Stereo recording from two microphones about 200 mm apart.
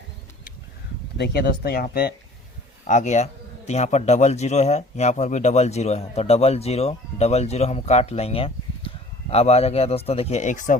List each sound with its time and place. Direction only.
1.2 s speech: 50° left (ahead or behind)
2.8 s a man's voice: 35° left (ahead or behind)